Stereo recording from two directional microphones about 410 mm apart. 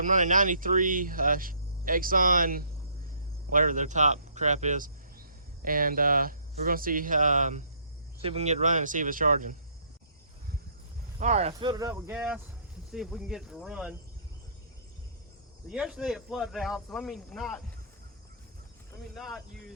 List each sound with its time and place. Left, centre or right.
0.0 s speech: centre
11.2 s speech: centre
15.7 s speech: centre
18.9 s speech: centre